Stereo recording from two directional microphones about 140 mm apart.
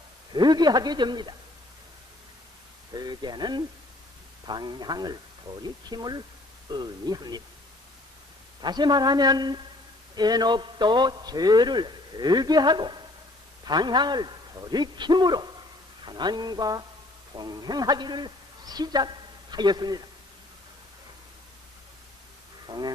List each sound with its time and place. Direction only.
0.3 s a man's voice: 30° right (ahead or behind)
2.9 s a man's voice: 30° right (ahead or behind)
8.6 s a woman's voice: 30° right (ahead or behind)
22.6 s a sound: 30° right (ahead or behind)